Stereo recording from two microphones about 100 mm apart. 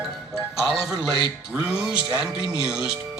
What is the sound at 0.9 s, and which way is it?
Speech, 45° right (ahead or behind).